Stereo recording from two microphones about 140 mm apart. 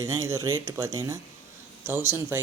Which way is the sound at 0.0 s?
20° right (ahead or behind).